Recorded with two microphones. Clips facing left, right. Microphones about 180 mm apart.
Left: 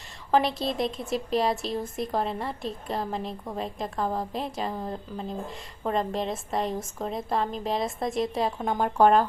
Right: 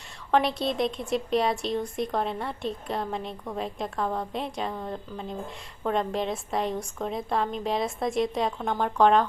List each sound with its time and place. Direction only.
0.3 s a woman's voice: centre (ahead or behind)